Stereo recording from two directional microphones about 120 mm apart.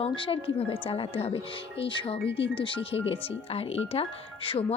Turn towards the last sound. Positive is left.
turn(degrees=50)  # may be behind; listen again after turning